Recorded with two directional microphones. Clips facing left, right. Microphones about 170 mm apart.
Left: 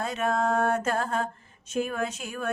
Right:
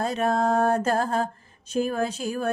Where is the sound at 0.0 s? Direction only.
35° right (ahead or behind).